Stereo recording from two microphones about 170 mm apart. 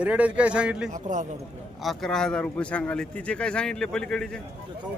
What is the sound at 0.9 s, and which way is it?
Speech, 45° right (ahead or behind).